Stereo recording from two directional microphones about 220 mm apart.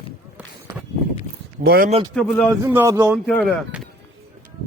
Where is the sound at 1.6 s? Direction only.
45° right (ahead or behind).